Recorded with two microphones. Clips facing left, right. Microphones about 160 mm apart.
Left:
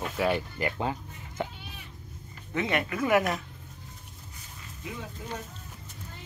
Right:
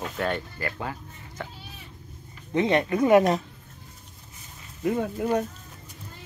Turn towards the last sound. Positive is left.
turn(degrees=-60)  # may be behind; listen again after turning